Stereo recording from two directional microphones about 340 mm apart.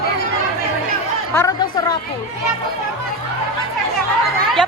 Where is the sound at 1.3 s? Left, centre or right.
Centre.